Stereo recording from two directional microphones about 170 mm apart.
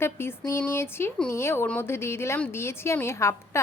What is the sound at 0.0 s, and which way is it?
Speech, 15° left (ahead or behind).